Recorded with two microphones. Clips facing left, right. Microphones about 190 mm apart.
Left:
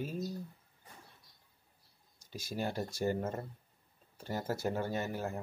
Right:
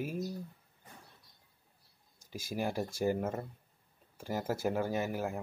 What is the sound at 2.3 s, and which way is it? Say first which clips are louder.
Speech: right 2 dB; 10° right (ahead or behind).